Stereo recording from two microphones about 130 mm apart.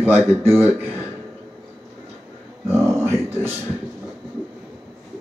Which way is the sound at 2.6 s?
20° right (ahead or behind).